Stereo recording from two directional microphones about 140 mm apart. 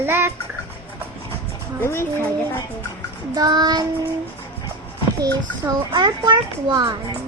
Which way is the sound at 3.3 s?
30° right (ahead or behind).